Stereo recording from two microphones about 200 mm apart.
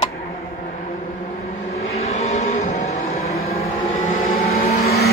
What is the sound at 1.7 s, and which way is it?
Vehicle, 30° left (ahead or behind).